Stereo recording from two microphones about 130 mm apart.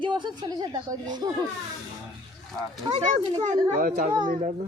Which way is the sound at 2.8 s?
35° right (ahead or behind).